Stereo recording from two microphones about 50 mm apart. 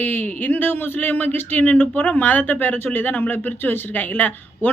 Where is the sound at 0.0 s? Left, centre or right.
Left.